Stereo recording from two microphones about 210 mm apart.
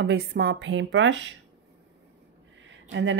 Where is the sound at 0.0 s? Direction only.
50° right (ahead or behind).